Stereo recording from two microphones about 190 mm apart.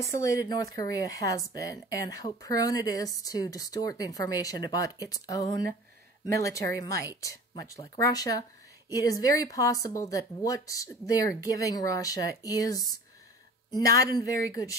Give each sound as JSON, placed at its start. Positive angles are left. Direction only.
{"t": 0.1, "sound": "a woman's voice", "side_deg": 15}